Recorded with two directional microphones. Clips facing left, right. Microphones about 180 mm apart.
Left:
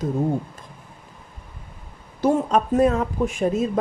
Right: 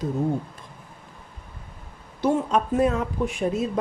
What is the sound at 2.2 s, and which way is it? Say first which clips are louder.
Speech: left 3 dB; 45° left (ahead or behind).